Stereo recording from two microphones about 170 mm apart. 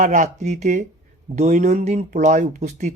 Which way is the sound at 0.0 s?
45° right (ahead or behind).